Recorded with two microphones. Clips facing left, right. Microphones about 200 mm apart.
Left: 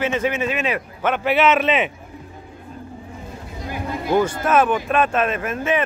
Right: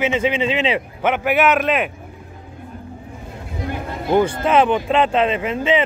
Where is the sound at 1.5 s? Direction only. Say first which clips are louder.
Even; centre (ahead or behind).